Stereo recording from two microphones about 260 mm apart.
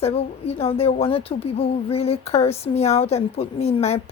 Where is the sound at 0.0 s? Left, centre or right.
Left.